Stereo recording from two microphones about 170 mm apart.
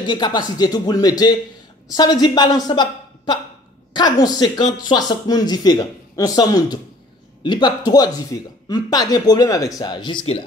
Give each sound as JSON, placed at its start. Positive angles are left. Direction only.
{"t": 0.1, "sound": "speech", "side_deg": 25}